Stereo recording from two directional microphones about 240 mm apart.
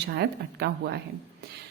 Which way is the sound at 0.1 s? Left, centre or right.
Right.